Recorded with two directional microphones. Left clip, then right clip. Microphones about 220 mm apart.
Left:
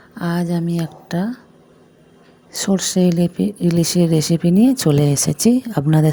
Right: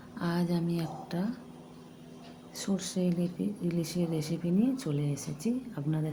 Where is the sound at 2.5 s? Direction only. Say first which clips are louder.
Left 16 dB; 40° left (ahead or behind).